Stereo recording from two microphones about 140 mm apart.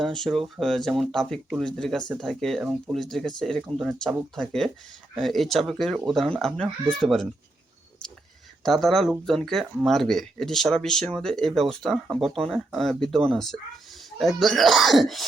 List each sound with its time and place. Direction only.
0.0 s speech: centre (ahead or behind)
8.6 s speech: centre (ahead or behind)